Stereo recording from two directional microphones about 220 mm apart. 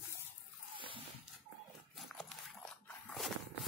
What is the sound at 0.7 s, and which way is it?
Dog, 25° right (ahead or behind).